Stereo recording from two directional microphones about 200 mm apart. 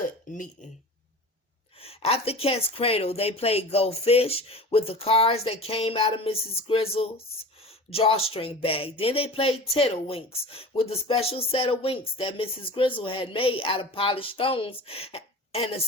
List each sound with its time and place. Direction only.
0.0 s speech: 40° left (ahead or behind)
1.8 s speech: 30° left (ahead or behind)